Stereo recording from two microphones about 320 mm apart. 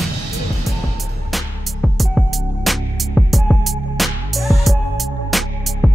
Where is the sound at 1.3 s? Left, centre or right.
Centre.